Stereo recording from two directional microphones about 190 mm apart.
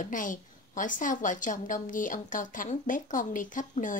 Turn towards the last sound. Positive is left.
turn(degrees=45)  # may be behind; listen again after turning